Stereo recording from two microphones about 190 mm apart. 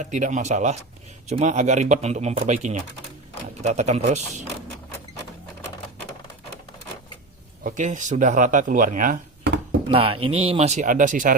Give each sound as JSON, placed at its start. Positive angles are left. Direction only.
{"t": 0.0, "sound": "speech", "side_deg": -40}
{"t": 7.6, "sound": "speech", "side_deg": -40}
{"t": 9.9, "sound": "speech", "side_deg": -30}